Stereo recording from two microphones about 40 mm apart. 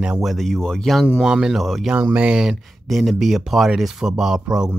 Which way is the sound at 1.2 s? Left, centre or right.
Centre.